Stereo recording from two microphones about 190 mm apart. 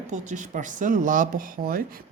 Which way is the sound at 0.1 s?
40° right (ahead or behind).